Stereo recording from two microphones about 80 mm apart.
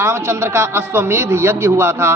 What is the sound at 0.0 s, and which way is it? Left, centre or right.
A man's voice, right.